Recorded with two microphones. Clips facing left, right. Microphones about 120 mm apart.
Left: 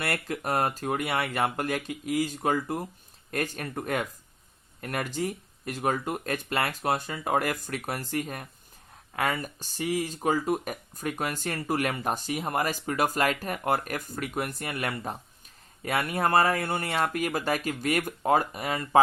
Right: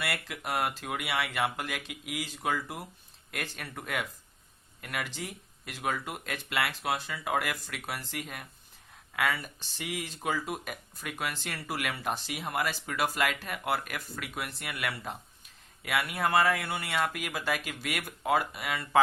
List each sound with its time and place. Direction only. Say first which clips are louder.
0.0 s speech: left 5 dB; 45° left (ahead or behind)